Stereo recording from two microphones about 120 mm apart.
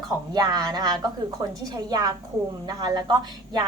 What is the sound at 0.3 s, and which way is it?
A woman's voice, 35° right (ahead or behind).